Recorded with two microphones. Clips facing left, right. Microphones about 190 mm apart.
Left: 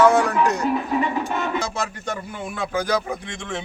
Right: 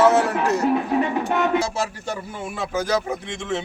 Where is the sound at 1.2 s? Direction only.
65° right (ahead or behind).